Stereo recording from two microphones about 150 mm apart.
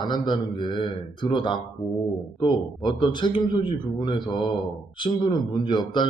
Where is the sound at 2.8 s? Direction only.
30° left (ahead or behind).